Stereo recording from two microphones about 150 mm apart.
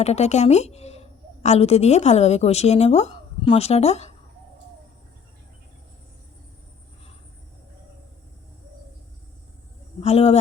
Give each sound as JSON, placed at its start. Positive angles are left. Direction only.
{"t": 0.0, "sound": "a woman's voice", "side_deg": 45}
{"t": 10.0, "sound": "a woman's voice", "side_deg": 45}